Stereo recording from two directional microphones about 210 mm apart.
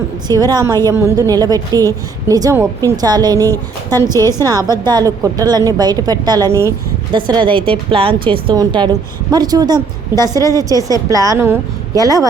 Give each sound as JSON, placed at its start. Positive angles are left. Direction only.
{"t": 0.3, "sound": "a woman's voice", "side_deg": -20}
{"t": 3.5, "sound": "speech", "side_deg": 10}
{"t": 4.8, "sound": "a woman's voice", "side_deg": -20}
{"t": 10.8, "sound": "speech", "side_deg": 15}
{"t": 11.1, "sound": "a woman's voice", "side_deg": -15}